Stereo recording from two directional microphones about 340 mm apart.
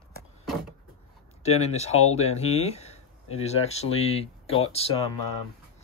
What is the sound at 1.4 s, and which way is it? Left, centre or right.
Speech, centre.